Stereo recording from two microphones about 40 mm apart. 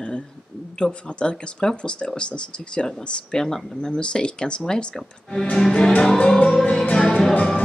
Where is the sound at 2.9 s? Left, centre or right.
Centre.